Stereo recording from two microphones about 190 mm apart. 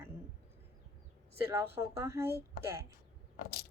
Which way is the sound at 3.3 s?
55° left (ahead or behind).